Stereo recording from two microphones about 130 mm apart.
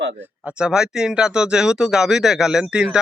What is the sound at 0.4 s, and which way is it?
Speech, 5° right (ahead or behind).